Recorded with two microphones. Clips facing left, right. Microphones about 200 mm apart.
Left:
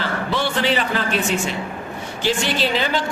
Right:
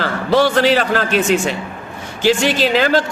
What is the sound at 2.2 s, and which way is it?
Speech, 90° right.